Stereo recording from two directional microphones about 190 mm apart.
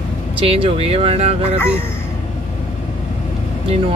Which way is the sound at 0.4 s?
30° right (ahead or behind).